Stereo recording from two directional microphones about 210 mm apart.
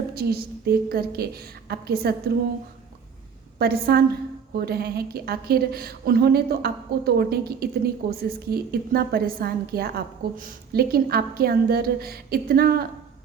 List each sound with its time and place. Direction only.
0.1 s a woman's voice: 45° right (ahead or behind)
3.6 s a woman's voice: 45° right (ahead or behind)